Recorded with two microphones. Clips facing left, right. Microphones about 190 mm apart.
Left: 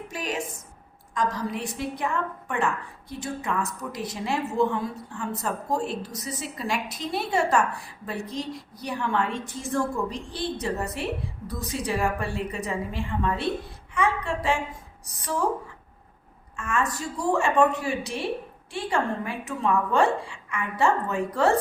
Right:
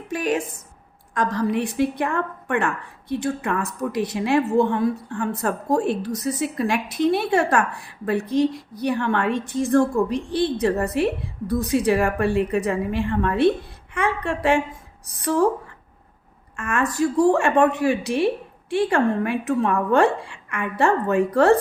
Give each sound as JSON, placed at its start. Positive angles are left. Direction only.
{"t": 0.1, "sound": "a woman's voice", "side_deg": -55}
{"t": 16.6, "sound": "a woman's voice", "side_deg": -60}